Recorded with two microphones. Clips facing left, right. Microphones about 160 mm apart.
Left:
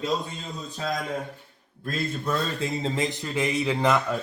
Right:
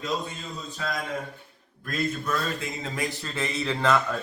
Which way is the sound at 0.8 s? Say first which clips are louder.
Left 2 dB; 30° left (ahead or behind).